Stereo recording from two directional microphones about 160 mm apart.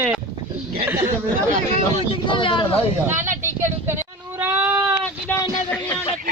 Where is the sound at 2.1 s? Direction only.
30° left (ahead or behind).